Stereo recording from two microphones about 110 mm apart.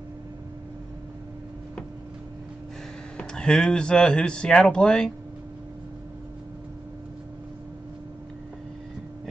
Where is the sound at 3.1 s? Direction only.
10° left (ahead or behind).